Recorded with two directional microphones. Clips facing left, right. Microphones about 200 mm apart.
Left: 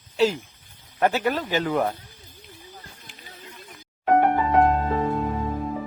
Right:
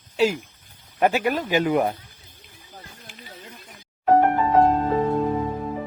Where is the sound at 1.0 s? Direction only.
15° right (ahead or behind).